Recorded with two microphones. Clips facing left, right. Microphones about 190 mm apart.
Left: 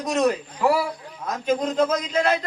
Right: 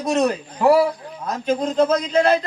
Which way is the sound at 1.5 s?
30° right (ahead or behind).